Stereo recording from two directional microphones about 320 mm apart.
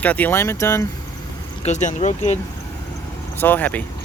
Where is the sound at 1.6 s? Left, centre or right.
Left.